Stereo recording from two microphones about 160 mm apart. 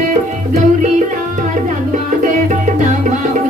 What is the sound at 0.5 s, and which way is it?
Music, 50° right (ahead or behind).